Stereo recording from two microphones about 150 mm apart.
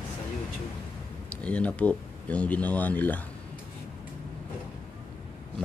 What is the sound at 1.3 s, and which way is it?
Speech, 10° left (ahead or behind).